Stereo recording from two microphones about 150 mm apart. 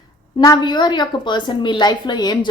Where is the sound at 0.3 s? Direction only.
30° left (ahead or behind).